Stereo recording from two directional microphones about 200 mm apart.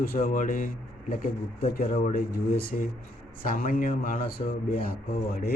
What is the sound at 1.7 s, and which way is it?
Speech, 50° left (ahead or behind).